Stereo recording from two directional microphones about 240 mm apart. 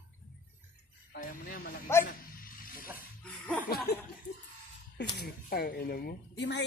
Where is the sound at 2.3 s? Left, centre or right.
Left.